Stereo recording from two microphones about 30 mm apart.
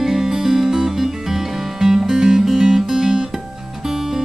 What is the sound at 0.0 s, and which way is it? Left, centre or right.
Music, centre.